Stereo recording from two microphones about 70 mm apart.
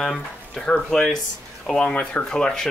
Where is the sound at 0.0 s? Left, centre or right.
Centre.